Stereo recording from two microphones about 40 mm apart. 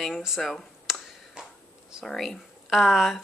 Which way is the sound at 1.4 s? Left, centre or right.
Right.